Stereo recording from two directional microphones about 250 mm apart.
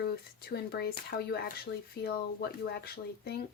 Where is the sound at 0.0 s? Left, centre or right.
Left.